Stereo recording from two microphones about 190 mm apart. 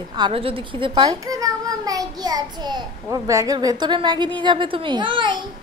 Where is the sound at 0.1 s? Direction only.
25° right (ahead or behind).